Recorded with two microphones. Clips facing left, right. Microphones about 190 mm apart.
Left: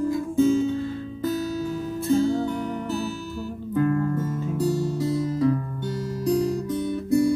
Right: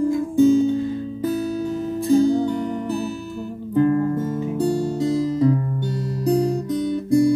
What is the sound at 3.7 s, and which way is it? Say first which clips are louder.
Music: right 5 dB; 30° right (ahead or behind).